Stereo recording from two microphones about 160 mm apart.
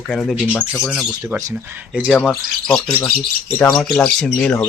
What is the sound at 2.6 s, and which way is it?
Speech, 5° left (ahead or behind).